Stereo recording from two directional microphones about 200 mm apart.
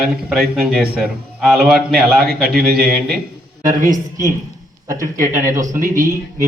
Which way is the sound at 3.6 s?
40° right (ahead or behind).